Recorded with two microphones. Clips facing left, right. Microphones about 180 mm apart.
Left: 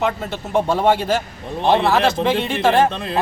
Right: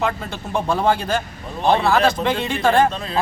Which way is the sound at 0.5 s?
25° left (ahead or behind).